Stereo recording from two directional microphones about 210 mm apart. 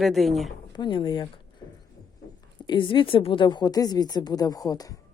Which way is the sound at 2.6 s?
20° left (ahead or behind).